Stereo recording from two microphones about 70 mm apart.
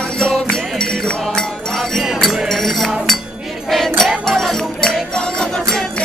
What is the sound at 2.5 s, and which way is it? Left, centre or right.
Chink, centre.